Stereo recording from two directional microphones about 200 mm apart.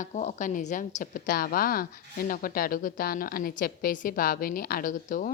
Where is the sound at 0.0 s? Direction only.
40° left (ahead or behind).